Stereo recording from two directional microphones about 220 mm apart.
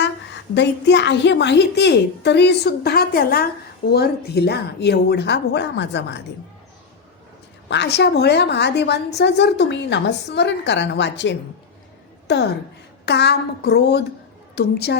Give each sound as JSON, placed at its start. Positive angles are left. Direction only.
{"t": 0.5, "sound": "a woman's voice", "side_deg": 50}
{"t": 7.7, "sound": "a woman's voice", "side_deg": 50}